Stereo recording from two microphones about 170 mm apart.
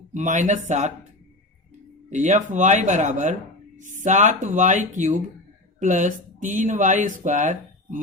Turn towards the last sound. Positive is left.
turn(degrees=-50)  # may be behind; listen again after turning